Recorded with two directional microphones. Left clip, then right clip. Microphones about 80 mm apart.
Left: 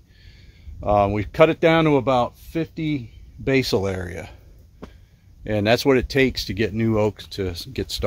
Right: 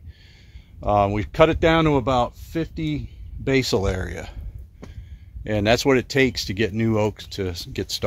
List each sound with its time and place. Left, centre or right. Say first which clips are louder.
0.7 s speech: left 1 dB; right
5.4 s speech: even; right